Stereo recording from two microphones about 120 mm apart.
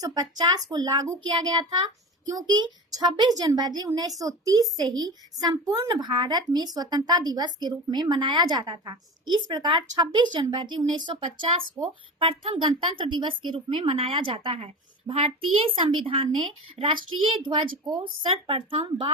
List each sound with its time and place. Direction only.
0.0 s a woman's voice: 35° right (ahead or behind); by 19.1 s 50° right (ahead or behind)